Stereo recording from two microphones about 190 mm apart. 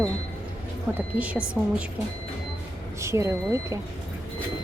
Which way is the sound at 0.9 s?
10° right (ahead or behind).